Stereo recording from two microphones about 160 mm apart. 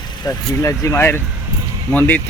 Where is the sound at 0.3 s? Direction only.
20° left (ahead or behind).